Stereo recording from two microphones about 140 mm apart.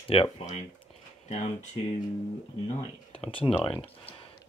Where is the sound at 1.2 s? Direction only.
55° left (ahead or behind).